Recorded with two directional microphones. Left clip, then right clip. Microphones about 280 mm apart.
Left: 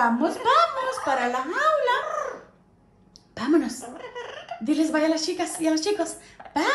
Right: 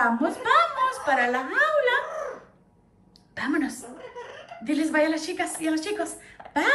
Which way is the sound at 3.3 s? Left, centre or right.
Centre.